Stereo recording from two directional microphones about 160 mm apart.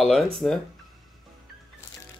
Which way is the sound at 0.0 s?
Centre (ahead or behind).